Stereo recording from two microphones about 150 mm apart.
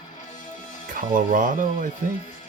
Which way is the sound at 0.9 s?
65° right (ahead or behind).